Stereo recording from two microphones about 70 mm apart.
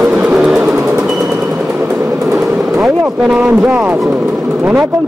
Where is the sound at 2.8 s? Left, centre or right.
Centre.